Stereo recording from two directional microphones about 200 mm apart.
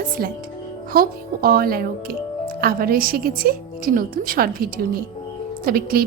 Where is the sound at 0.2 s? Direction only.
50° right (ahead or behind).